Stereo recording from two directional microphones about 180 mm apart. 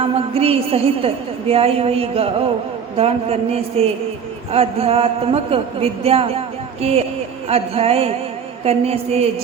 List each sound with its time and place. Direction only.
0.0 s a woman's voice: 35° right (ahead or behind)